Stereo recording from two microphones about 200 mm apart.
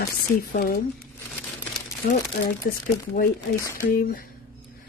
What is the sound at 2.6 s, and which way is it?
Speech, 50° left (ahead or behind).